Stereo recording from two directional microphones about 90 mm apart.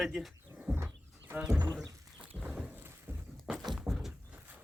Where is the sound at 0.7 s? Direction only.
25° right (ahead or behind).